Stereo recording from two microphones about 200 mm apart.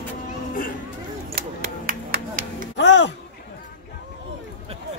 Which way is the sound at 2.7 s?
65° left (ahead or behind).